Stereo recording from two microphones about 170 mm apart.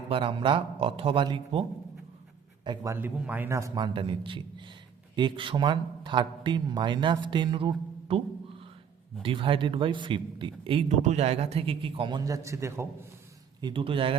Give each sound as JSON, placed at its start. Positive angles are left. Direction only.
{"t": 0.1, "sound": "a man's voice", "side_deg": -30}
{"t": 2.6, "sound": "a man's voice", "side_deg": -15}
{"t": 3.9, "sound": "a man's voice", "side_deg": -30}
{"t": 9.2, "sound": "a man's voice", "side_deg": -30}
{"t": 13.6, "sound": "a man's voice", "side_deg": -25}